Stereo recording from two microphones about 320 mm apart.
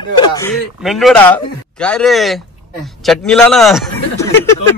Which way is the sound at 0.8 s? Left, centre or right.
Centre.